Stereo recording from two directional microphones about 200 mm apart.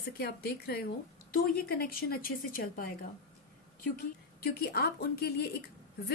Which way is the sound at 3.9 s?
50° left (ahead or behind).